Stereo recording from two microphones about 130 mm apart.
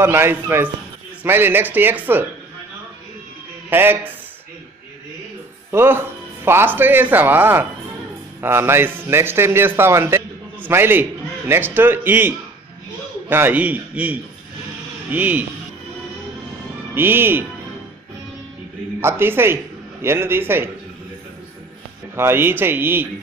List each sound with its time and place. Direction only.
0.0 s a man's voice: 20° right (ahead or behind)
3.7 s a man's voice: 15° right (ahead or behind)
5.7 s a man's voice: 20° right (ahead or behind)
16.9 s a man's voice: 15° right (ahead or behind)
18.9 s speech: 15° right (ahead or behind)
22.1 s a man's voice: 20° right (ahead or behind)